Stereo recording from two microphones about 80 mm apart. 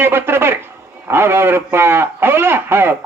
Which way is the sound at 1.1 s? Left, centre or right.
Right.